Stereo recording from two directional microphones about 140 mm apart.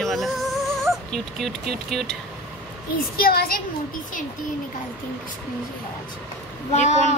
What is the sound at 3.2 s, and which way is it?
Speech, 90° left.